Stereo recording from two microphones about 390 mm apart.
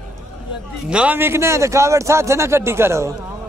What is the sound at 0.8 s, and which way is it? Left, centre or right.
Speech, centre.